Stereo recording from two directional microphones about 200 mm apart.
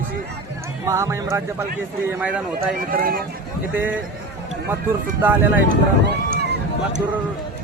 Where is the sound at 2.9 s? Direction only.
50° right (ahead or behind).